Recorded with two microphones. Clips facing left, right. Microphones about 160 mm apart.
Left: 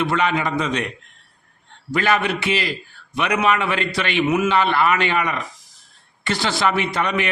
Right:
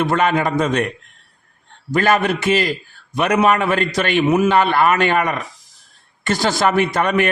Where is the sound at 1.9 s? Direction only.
45° right (ahead or behind).